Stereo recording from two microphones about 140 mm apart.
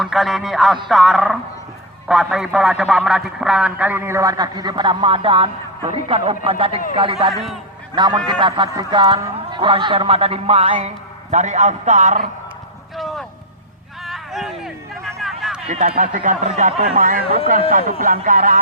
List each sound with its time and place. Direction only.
0.0 s a man's voice: centre (ahead or behind); by 7.4 s 45° right (ahead or behind)
7.9 s speech: 30° right (ahead or behind); by 12.3 s 60° right (ahead or behind)
13.0 s a sound: centre (ahead or behind)
15.7 s speech: 65° right (ahead or behind)
17.0 s speech: 85° right